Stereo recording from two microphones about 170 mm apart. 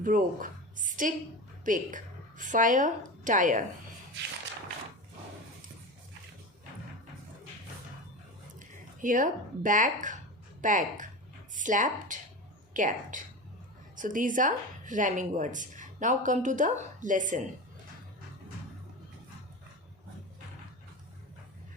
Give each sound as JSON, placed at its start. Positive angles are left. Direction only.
{"t": 0.0, "sound": "a woman's voice", "side_deg": -55}
{"t": 8.5, "sound": "speech", "side_deg": -50}